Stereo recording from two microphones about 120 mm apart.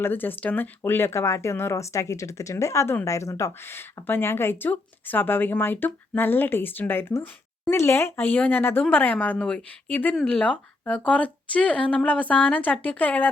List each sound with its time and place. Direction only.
0.0 s a woman's voice: 15° left (ahead or behind)